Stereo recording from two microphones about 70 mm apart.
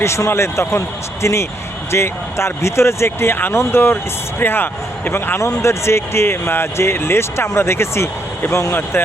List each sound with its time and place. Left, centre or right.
0.0 s speech: left